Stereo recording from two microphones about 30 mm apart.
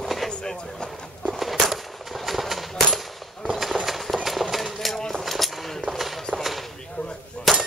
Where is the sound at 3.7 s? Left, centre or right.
Right.